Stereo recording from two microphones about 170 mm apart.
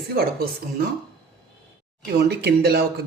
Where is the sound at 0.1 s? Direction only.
65° right (ahead or behind).